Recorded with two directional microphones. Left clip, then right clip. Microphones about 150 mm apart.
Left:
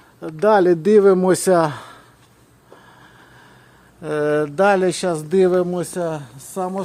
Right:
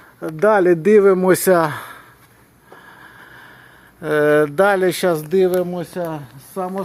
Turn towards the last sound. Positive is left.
turn(degrees=25)  # may be behind; listen again after turning